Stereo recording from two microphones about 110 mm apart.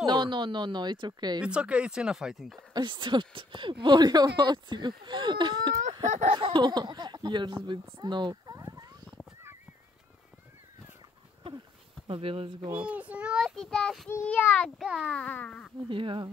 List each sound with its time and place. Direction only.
0.0 s speech: 45° right (ahead or behind)
1.4 s speech: 10° right (ahead or behind)
2.7 s speech: 45° right (ahead or behind)
8.0 s a sound: 45° right (ahead or behind)
12.1 s speech: 55° right (ahead or behind)
12.7 s speech: 10° right (ahead or behind)
13.4 s a child's voice: 5° left (ahead or behind)
14.2 s a sound: 15° left (ahead or behind)
14.8 s a child's voice: 5° right (ahead or behind)
15.1 s a sound: 10° left (ahead or behind)
15.9 s speech: 50° right (ahead or behind)